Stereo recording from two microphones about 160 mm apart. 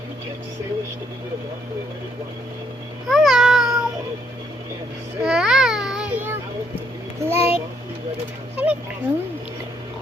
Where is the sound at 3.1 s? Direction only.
Centre (ahead or behind).